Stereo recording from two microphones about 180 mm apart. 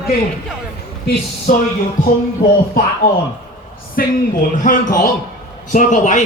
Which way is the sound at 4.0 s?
55° left (ahead or behind).